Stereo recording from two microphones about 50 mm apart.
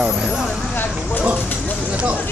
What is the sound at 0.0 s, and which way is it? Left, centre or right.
Vehicle, centre.